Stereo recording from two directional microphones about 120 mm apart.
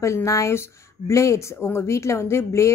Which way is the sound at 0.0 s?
25° left (ahead or behind).